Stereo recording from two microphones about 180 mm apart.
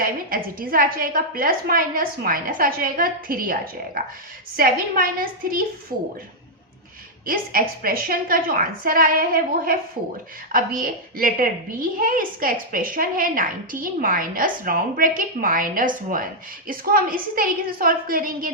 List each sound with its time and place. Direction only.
0.0 s a woman's voice: 50° right (ahead or behind)
7.3 s a woman's voice: 55° right (ahead or behind)